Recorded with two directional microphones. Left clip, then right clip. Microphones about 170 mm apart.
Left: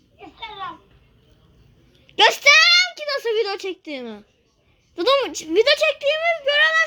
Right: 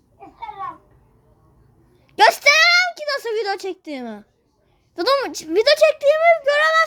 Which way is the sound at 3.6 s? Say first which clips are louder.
Right 1 dB; 45° right (ahead or behind).